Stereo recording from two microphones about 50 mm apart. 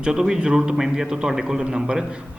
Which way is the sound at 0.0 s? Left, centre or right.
Centre.